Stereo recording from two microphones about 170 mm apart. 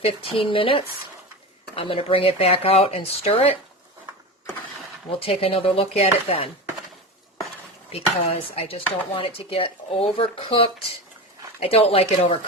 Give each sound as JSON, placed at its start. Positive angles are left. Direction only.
{"t": 0.0, "sound": "chopping", "side_deg": 35}
{"t": 5.2, "sound": "chopping", "side_deg": 35}
{"t": 7.9, "sound": "chopping", "side_deg": 35}